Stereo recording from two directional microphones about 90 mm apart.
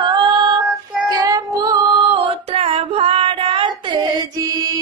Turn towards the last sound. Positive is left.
turn(degrees=-70)  # may be behind; listen again after turning